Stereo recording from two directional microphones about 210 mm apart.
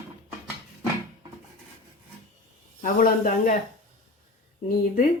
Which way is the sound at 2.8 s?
40° left (ahead or behind).